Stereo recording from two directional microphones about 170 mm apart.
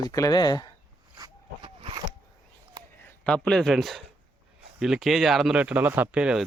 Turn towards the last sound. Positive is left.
turn(degrees=-5)  # may be behind; listen again after turning